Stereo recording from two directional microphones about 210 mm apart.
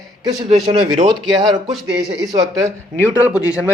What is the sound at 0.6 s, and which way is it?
Speech, 20° right (ahead or behind).